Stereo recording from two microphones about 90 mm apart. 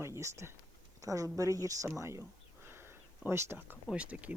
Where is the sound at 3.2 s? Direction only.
25° right (ahead or behind).